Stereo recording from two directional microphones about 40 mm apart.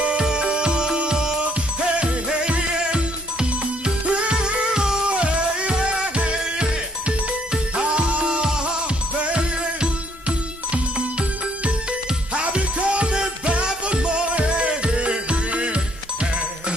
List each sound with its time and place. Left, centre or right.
0.0 s music: right
12.4 s music: right